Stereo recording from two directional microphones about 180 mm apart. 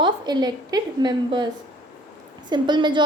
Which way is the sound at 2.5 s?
25° right (ahead or behind).